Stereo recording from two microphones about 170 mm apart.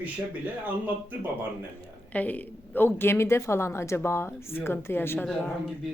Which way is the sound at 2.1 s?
10° left (ahead or behind).